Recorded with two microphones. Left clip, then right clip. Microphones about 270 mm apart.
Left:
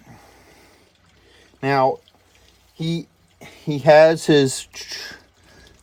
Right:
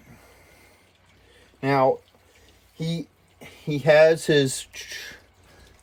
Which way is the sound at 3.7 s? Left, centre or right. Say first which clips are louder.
Left 4 dB; left.